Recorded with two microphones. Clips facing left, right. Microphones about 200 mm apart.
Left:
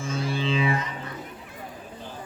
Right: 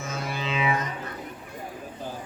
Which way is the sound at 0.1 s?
30° left (ahead or behind).